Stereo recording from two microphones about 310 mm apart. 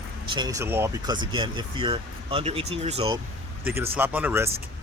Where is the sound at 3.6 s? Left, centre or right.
Centre.